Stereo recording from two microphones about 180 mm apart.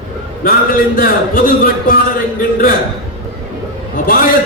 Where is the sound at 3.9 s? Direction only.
50° left (ahead or behind).